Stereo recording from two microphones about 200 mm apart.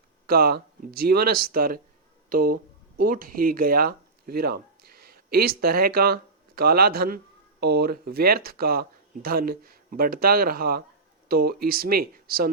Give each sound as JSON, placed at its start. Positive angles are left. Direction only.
{"t": 0.3, "sound": "speech", "side_deg": -50}